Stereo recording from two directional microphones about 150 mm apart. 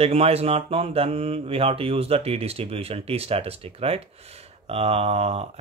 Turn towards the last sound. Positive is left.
turn(degrees=-45)  # may be behind; listen again after turning